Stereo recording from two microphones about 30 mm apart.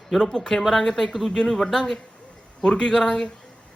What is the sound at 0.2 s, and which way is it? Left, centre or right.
Speech, centre.